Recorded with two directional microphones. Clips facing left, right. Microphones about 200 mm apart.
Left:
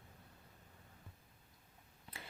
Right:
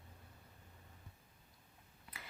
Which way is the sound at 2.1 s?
30° left (ahead or behind).